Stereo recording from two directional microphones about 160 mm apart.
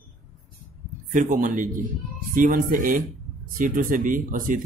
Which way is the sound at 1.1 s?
55° right (ahead or behind).